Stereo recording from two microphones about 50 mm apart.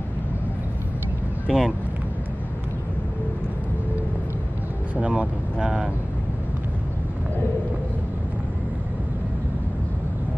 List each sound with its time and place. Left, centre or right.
1.5 s speech: centre
5.0 s vehicle: right